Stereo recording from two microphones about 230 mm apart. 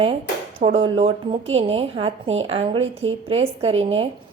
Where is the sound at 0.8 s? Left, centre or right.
Right.